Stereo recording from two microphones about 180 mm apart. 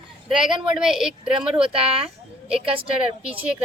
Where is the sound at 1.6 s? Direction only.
30° right (ahead or behind).